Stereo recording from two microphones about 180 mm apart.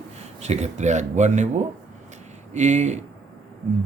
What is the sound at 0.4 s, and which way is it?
Speech, 40° right (ahead or behind).